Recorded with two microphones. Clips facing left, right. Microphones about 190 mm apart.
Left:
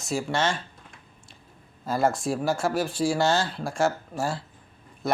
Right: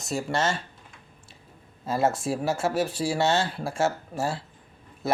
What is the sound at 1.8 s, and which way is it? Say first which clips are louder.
Speech: even; centre (ahead or behind).